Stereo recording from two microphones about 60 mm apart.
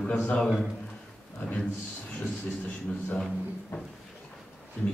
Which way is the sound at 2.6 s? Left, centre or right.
Left.